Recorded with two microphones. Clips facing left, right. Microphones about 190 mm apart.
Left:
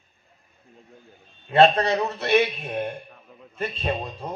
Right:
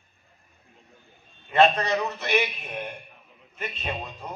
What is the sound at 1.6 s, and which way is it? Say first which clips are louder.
A man's voice: left 3 dB; 35° left (ahead or behind).